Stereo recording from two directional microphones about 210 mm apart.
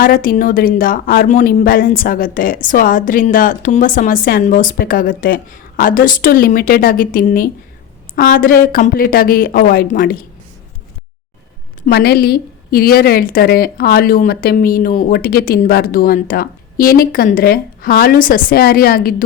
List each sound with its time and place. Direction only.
0.0 s a woman's voice: 40° left (ahead or behind)
11.9 s a woman's voice: 50° left (ahead or behind)